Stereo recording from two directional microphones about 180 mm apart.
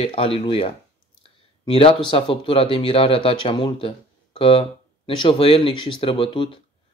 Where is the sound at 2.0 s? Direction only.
30° left (ahead or behind).